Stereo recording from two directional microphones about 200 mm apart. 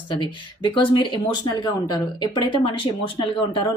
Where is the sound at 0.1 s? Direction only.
25° left (ahead or behind).